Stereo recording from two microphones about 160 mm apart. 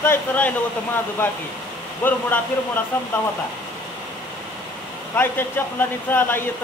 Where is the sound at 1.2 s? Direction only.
15° left (ahead or behind).